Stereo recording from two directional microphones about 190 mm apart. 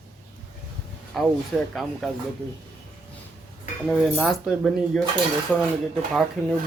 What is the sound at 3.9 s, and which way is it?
Speech, centre (ahead or behind).